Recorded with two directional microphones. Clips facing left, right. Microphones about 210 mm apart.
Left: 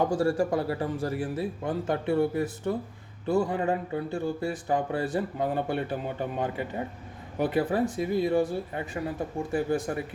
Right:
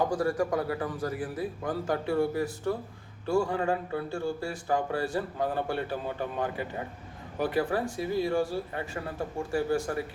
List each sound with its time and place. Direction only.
0.1 s speech: 30° left (ahead or behind)